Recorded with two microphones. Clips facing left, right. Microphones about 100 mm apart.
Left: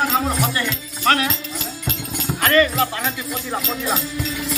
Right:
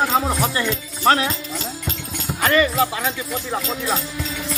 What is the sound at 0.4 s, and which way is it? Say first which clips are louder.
Music: right 1 dB; 20° right (ahead or behind).